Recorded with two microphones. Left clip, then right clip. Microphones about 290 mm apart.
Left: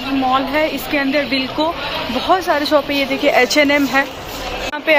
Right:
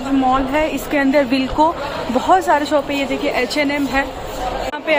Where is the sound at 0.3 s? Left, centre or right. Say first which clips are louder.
Left 2 dB; centre.